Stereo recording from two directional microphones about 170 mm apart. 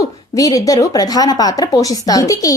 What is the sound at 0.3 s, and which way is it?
Speech, 20° left (ahead or behind).